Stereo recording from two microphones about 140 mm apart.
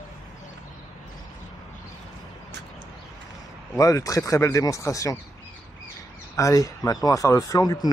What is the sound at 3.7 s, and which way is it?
Speech, 25° left (ahead or behind).